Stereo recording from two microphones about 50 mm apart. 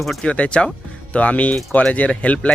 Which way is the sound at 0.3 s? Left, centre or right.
Left.